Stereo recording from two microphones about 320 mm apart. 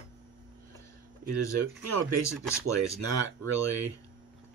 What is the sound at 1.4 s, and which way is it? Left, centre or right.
Speech, left.